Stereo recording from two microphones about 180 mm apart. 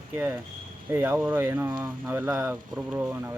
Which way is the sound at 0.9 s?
10° right (ahead or behind).